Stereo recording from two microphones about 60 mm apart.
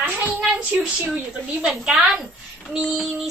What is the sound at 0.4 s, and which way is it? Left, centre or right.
A woman's voice, right.